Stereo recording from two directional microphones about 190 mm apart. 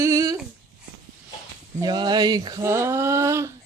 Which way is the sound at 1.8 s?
20° right (ahead or behind).